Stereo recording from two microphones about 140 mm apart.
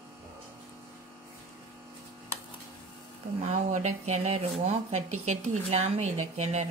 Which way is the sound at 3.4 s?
55° right (ahead or behind).